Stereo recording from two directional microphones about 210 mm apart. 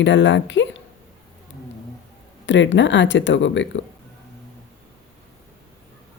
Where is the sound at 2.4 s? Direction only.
60° left (ahead or behind).